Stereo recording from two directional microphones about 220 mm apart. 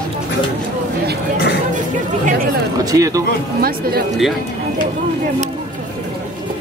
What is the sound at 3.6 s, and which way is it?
Speech, 45° right (ahead or behind).